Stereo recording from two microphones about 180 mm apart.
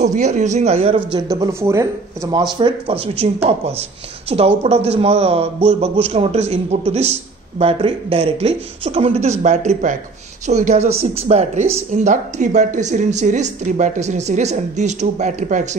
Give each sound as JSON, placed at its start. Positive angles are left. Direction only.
{"t": 0.0, "sound": "a man's voice", "side_deg": -40}
{"t": 1.3, "sound": "a man's voice", "side_deg": -15}